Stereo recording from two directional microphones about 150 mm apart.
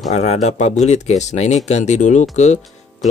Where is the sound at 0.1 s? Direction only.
50° left (ahead or behind).